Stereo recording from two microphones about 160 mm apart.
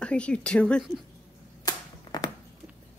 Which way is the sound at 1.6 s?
25° left (ahead or behind).